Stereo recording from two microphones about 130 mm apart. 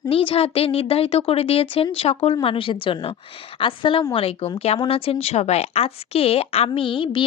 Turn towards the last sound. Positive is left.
turn(degrees=40)  # may be behind; listen again after turning